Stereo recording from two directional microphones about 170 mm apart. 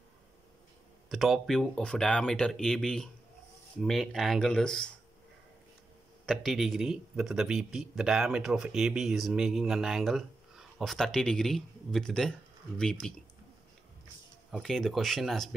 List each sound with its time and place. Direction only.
1.0 s speech: centre (ahead or behind)
6.2 s speech: centre (ahead or behind)
14.5 s speech: centre (ahead or behind)